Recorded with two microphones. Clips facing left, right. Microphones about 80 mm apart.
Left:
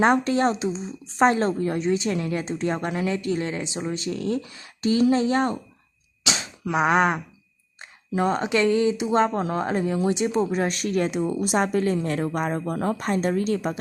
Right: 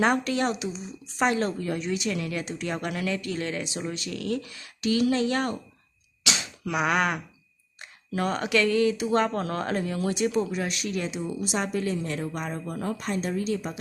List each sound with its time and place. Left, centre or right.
0.0 s speech: left
6.7 s speech: left